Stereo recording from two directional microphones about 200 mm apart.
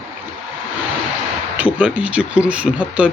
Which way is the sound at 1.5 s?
5° right (ahead or behind).